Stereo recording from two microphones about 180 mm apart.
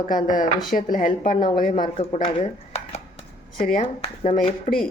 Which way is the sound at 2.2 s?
35° left (ahead or behind).